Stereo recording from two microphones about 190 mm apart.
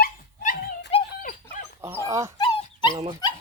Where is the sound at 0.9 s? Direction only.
30° left (ahead or behind).